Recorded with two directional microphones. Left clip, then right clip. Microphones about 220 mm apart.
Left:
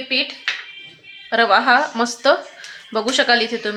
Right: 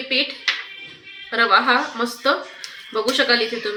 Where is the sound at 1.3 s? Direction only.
70° left (ahead or behind).